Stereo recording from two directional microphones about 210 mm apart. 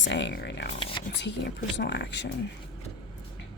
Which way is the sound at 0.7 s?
25° left (ahead or behind).